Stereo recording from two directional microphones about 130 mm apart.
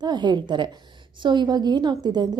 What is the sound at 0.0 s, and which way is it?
A woman's voice, 35° right (ahead or behind).